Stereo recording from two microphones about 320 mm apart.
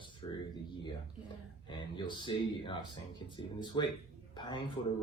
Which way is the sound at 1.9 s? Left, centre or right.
Centre.